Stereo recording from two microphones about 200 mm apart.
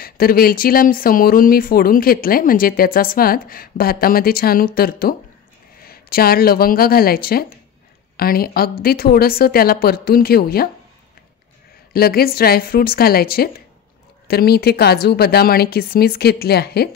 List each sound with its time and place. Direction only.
0.0 s a woman's voice: 50° left (ahead or behind)
11.9 s speech: 50° left (ahead or behind)